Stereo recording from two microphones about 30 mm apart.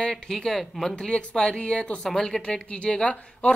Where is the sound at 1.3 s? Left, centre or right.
Left.